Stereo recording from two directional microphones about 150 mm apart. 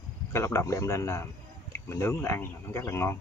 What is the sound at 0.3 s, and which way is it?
A man's voice, 20° left (ahead or behind).